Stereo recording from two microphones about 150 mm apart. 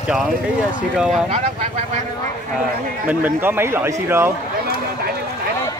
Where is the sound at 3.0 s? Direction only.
15° right (ahead or behind).